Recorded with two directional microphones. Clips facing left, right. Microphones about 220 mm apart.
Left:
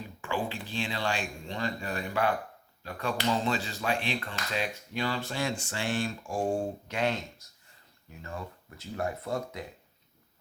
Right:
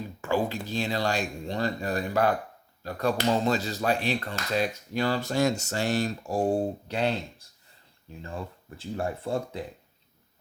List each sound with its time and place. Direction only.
0.2 s speech: 40° right (ahead or behind)